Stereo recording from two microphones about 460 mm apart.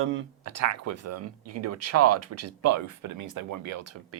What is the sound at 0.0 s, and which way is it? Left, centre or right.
Speech, right.